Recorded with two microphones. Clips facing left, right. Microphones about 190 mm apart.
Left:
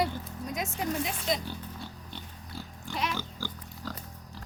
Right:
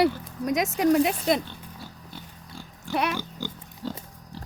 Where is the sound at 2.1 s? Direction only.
5° right (ahead or behind).